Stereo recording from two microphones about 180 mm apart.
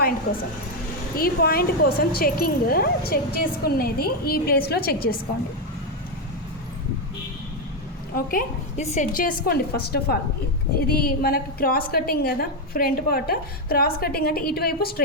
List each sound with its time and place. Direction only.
1.1 s speech: 55° left (ahead or behind)
8.1 s a woman's voice: 50° left (ahead or behind)